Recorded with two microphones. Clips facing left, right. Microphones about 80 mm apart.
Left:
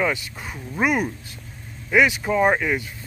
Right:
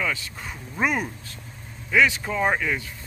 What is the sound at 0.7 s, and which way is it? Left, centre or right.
Speech, centre.